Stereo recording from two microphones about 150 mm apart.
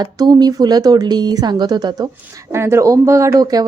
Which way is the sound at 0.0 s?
25° right (ahead or behind).